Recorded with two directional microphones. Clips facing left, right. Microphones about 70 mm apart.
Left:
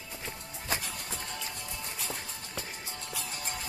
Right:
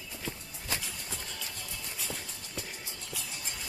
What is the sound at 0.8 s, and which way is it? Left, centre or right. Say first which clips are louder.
Music: left 2 dB; left.